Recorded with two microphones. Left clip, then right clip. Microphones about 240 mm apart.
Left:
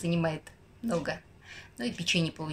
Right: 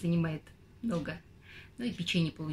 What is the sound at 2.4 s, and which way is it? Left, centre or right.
Speech, left.